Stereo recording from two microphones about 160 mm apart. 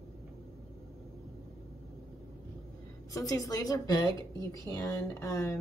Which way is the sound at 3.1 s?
20° left (ahead or behind).